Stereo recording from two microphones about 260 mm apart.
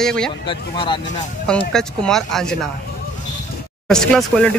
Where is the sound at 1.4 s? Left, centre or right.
Centre.